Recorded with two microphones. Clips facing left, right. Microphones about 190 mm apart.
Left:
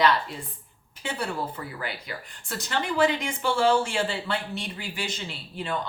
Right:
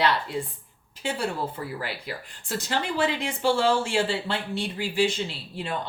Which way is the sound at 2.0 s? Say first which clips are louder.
Right 3 dB; 30° right (ahead or behind).